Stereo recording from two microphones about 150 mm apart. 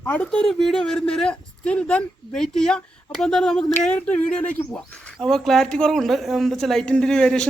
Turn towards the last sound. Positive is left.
turn(degrees=5)  # may be behind; listen again after turning